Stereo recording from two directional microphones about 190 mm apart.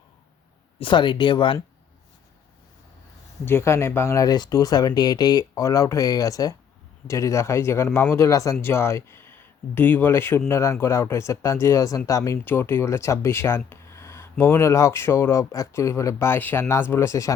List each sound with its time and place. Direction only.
0.8 s speech: 25° left (ahead or behind)
3.4 s speech: 15° left (ahead or behind)